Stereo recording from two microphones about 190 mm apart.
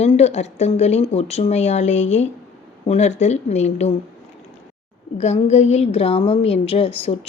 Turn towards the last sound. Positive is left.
turn(degrees=30)  # may be behind; listen again after turning